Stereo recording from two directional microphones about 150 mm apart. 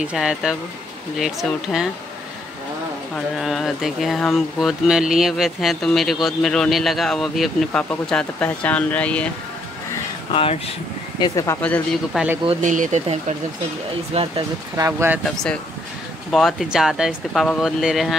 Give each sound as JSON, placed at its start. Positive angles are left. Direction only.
{"t": 0.0, "sound": "speech", "side_deg": -5}
{"t": 3.3, "sound": "speech", "side_deg": 0}
{"t": 10.3, "sound": "speech", "side_deg": 40}
{"t": 11.1, "sound": "speech", "side_deg": 25}
{"t": 11.6, "sound": "speech", "side_deg": 10}
{"t": 12.6, "sound": "speech", "side_deg": -55}
{"t": 14.1, "sound": "speech", "side_deg": -35}
{"t": 14.8, "sound": "speech", "side_deg": -20}
{"t": 15.2, "sound": "speech", "side_deg": 5}